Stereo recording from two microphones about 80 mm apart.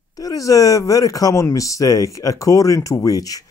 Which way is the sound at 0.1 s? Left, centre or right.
Left.